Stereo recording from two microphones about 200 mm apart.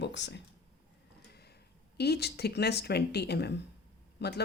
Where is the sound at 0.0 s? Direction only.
60° left (ahead or behind).